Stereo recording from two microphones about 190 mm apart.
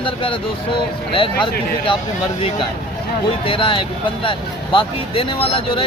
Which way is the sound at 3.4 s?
25° left (ahead or behind).